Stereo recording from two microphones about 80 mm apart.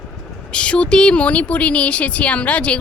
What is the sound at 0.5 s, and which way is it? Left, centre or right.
Speech, centre.